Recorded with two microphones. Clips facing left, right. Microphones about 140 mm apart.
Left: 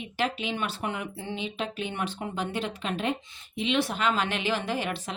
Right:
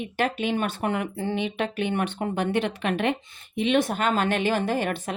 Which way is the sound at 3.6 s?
50° right (ahead or behind).